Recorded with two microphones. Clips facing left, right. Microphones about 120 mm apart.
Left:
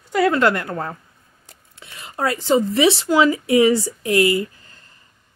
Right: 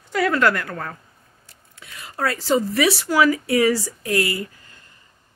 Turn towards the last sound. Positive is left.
turn(degrees=20)  # may be behind; listen again after turning